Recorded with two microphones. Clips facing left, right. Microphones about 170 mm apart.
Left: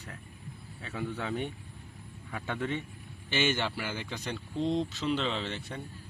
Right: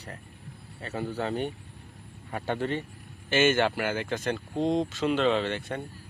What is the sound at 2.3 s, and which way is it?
Speech, 45° right (ahead or behind).